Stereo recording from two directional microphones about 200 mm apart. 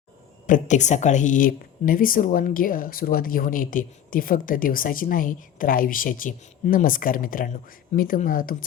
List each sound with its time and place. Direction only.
0.4 s a woman's voice: 40° left (ahead or behind)